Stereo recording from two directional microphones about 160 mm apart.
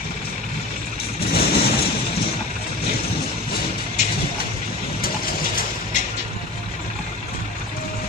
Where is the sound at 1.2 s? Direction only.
75° left (ahead or behind).